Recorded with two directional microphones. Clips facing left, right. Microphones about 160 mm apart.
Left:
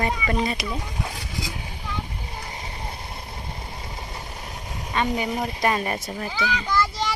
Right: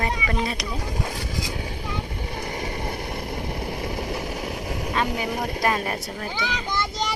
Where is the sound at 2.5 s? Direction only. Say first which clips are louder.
Right 6 dB; 65° right (ahead or behind).